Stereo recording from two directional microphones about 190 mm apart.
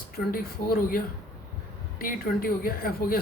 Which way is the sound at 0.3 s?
50° left (ahead or behind).